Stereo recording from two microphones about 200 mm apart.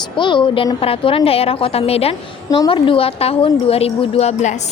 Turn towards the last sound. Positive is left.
turn(degrees=35)  # may be behind; listen again after turning